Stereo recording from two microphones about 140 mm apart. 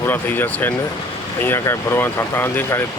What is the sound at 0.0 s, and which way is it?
Speech, 15° left (ahead or behind).